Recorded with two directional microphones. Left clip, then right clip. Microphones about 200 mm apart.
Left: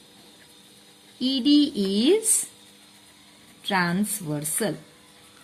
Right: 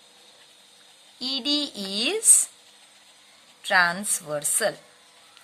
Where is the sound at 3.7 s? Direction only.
30° right (ahead or behind).